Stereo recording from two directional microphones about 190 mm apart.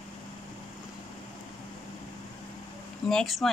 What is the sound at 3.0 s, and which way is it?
Speech, centre (ahead or behind).